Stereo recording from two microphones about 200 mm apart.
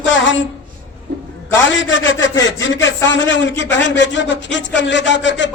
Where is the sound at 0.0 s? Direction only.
70° left (ahead or behind).